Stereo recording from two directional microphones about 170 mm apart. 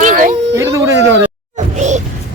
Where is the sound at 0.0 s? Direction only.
50° right (ahead or behind).